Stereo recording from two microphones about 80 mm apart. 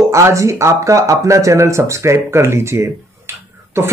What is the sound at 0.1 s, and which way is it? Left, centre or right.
Speech, right.